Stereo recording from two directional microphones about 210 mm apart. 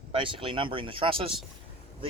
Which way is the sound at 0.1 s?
25° right (ahead or behind).